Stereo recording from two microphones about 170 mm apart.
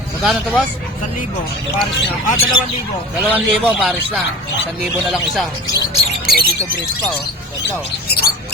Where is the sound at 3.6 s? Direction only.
5° right (ahead or behind).